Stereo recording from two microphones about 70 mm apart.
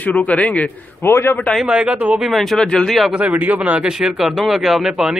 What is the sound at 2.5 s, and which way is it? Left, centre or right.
Speech, centre.